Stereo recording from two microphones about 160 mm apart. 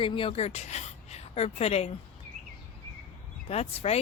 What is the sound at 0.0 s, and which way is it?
A woman's voice, 35° left (ahead or behind).